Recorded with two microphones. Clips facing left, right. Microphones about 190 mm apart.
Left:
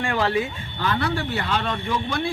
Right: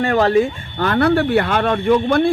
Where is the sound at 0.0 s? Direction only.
40° right (ahead or behind).